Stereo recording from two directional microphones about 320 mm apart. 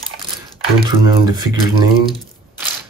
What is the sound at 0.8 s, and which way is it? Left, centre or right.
Speech, centre.